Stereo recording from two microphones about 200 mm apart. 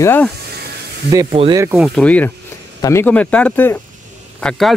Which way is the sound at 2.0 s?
5° left (ahead or behind).